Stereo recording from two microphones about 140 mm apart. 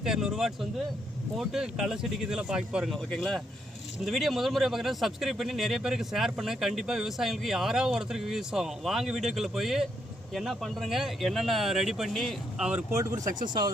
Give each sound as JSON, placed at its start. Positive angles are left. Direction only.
{"t": 0.0, "sound": "speech", "side_deg": -5}
{"t": 12.9, "sound": "speech", "side_deg": -20}